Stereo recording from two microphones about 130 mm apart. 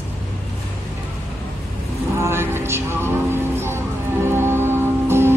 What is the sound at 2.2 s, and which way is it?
Music, 20° right (ahead or behind).